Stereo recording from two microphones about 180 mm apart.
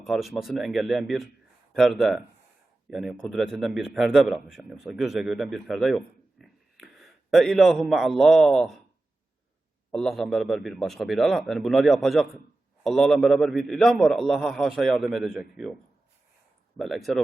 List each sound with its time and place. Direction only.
0.0 s a man's voice: centre (ahead or behind)
9.9 s a man's voice: centre (ahead or behind)
16.7 s a man's voice: centre (ahead or behind)